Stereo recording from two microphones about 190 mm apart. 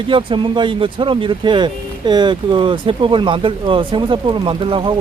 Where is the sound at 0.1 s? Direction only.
25° right (ahead or behind).